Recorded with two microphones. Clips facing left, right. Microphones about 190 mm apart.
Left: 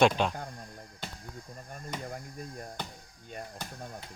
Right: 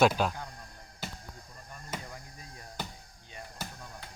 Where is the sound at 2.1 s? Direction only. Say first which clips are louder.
Left 7 dB; 50° left (ahead or behind).